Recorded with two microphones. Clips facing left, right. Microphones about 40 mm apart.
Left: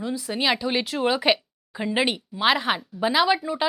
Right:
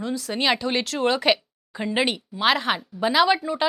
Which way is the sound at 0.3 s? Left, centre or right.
Centre.